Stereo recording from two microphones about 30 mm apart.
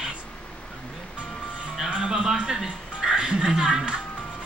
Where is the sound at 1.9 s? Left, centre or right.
Right.